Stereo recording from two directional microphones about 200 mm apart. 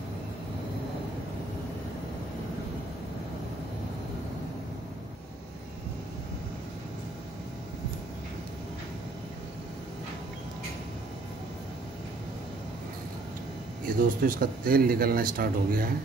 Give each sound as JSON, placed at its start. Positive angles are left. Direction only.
{"t": 13.8, "sound": "a man's voice", "side_deg": -45}